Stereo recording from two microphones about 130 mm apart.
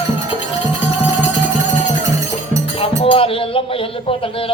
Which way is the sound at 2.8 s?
45° left (ahead or behind).